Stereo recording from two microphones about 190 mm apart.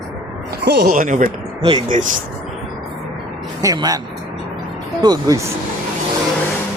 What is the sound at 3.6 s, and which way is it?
Speech, 20° right (ahead or behind).